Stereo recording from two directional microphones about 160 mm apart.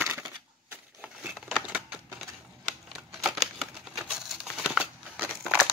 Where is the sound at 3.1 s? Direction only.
Centre (ahead or behind).